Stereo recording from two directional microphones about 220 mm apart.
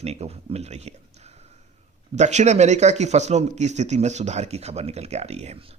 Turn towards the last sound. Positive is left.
turn(degrees=-30)  # may be behind; listen again after turning